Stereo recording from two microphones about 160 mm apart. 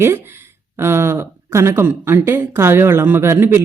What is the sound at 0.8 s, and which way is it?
A man's voice, 15° right (ahead or behind).